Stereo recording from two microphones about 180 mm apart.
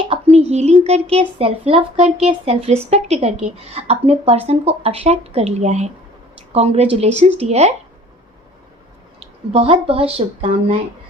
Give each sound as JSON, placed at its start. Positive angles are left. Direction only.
{"t": 0.1, "sound": "speech", "side_deg": -35}
{"t": 9.5, "sound": "speech", "side_deg": -35}